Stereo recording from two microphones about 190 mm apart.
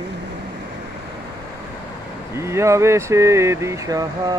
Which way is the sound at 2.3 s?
15° right (ahead or behind).